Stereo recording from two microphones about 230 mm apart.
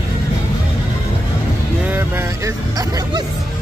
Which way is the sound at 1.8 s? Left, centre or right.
Centre.